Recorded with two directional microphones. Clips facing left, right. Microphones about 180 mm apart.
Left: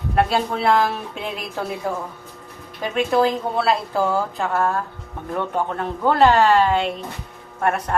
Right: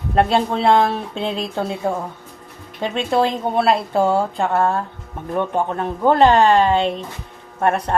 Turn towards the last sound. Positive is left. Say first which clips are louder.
# right 3 dB
turn(degrees=-30)  # may be behind; listen again after turning